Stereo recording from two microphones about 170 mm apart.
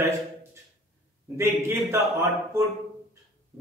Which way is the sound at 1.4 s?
15° right (ahead or behind).